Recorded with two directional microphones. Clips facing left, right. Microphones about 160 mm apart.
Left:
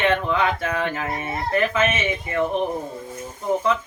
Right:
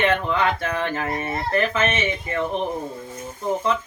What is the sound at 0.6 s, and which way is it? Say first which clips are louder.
Speech: even; 5° left (ahead or behind).